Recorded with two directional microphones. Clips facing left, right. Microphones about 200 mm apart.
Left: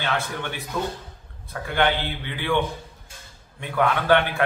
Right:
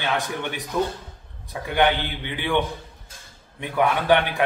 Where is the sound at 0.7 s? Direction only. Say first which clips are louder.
Right 4 dB; 15° right (ahead or behind).